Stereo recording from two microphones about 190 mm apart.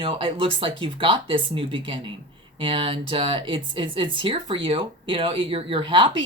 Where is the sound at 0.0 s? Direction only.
30° right (ahead or behind).